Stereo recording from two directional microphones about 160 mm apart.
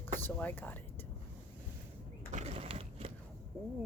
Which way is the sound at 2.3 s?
45° right (ahead or behind).